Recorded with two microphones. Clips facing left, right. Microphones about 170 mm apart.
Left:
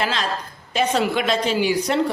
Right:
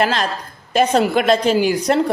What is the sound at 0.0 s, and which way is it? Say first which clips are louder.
Speech: right 5 dB; 55° right (ahead or behind).